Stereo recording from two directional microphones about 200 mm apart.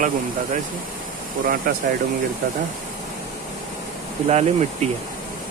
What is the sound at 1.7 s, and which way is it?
Speech, 45° right (ahead or behind).